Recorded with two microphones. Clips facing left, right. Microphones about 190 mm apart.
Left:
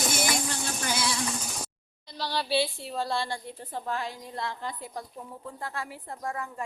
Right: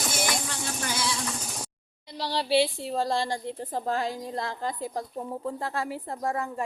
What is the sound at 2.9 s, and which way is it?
A woman's voice, 40° right (ahead or behind).